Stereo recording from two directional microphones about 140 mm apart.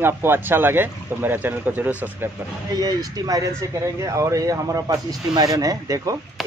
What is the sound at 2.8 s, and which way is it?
Speech, 25° right (ahead or behind).